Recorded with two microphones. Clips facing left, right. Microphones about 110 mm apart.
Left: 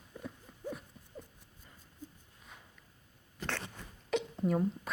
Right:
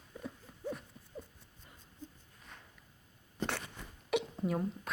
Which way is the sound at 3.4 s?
30° right (ahead or behind).